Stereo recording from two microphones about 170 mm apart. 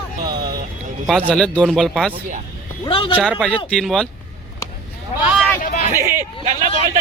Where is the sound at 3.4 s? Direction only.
Centre (ahead or behind).